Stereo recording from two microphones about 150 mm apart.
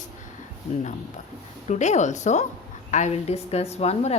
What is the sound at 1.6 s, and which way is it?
A woman's voice, 50° left (ahead or behind).